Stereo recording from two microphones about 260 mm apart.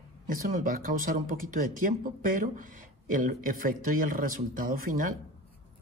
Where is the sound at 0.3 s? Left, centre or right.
Right.